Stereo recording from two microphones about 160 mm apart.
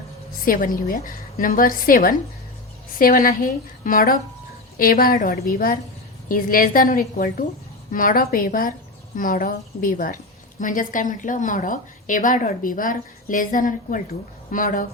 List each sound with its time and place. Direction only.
0.4 s a woman's voice: 60° left (ahead or behind)